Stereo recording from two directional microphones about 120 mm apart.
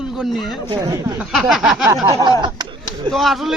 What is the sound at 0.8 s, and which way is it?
Speech, 30° right (ahead or behind).